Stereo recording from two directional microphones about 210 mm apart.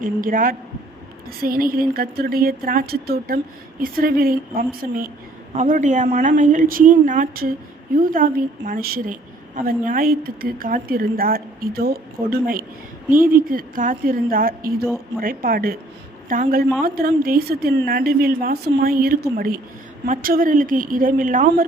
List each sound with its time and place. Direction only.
0.0 s a woman's voice: 40° right (ahead or behind)